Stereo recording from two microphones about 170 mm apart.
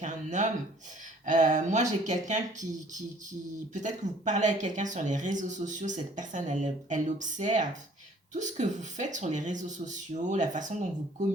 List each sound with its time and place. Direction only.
0.0 s speech: 45° right (ahead or behind)